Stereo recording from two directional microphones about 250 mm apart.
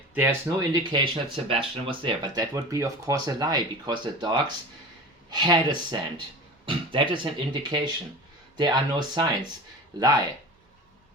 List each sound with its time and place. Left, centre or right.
0.1 s speech: centre